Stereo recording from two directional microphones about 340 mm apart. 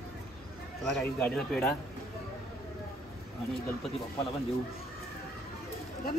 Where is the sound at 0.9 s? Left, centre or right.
Centre.